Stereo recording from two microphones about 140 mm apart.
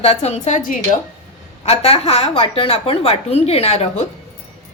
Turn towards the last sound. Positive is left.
turn(degrees=45)  # may be behind; listen again after turning